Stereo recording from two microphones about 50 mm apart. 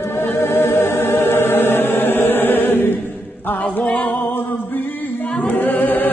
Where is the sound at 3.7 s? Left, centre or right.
Left.